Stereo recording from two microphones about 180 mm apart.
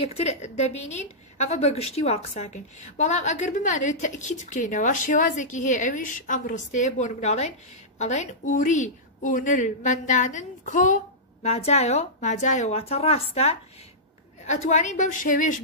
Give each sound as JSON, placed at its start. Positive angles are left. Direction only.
{"t": 0.0, "sound": "a woman's voice", "side_deg": 35}